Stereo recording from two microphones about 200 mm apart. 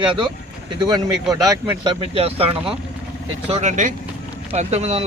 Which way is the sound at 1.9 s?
30° right (ahead or behind).